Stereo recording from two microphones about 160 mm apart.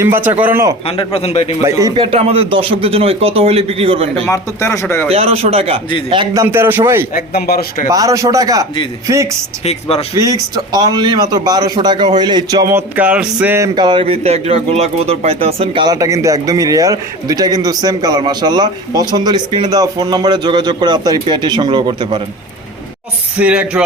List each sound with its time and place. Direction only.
0.3 s a man's voice: 10° right (ahead or behind)
0.9 s a man's voice: 35° left (ahead or behind)
1.8 s speech: 35° right (ahead or behind)
4.3 s speech: 20° left (ahead or behind)
5.0 s speech: 40° right (ahead or behind)
6.3 s a man's voice: 15° right (ahead or behind)
7.1 s a man's voice: 65° left (ahead or behind)
7.9 s speech: 20° right (ahead or behind)
13.7 s speech: 30° right (ahead or behind)
23.4 s a man's voice: 5° right (ahead or behind)